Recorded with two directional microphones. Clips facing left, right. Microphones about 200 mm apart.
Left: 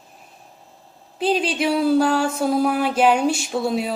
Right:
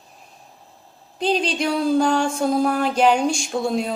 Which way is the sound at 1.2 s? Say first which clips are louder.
Left 1 dB; 5° left (ahead or behind).